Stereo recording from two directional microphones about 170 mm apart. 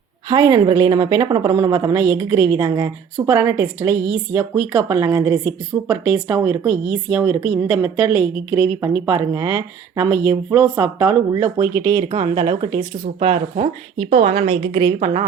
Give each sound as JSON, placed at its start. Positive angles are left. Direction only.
{"t": 0.3, "sound": "a woman's voice", "side_deg": -20}